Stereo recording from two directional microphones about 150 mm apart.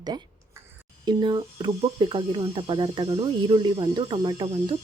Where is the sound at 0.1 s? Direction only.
25° right (ahead or behind).